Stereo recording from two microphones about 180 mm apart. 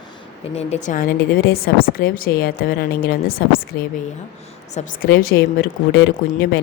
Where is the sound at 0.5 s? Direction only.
40° left (ahead or behind); by 3.7 s 55° left (ahead or behind).